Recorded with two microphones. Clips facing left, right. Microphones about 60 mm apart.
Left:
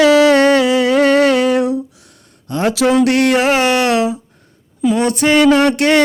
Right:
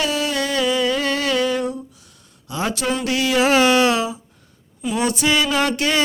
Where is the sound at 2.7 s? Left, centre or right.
Left.